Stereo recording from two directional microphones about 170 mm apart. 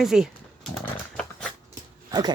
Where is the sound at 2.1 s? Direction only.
25° right (ahead or behind).